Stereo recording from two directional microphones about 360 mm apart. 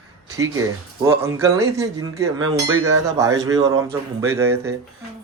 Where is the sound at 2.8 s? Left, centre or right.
Right.